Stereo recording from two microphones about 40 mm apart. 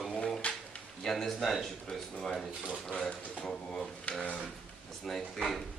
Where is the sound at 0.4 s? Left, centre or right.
Left.